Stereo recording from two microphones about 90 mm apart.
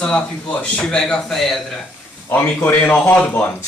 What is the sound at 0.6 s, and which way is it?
Speech, 10° left (ahead or behind).